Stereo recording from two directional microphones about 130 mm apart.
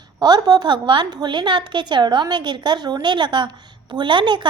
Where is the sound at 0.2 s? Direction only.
30° right (ahead or behind).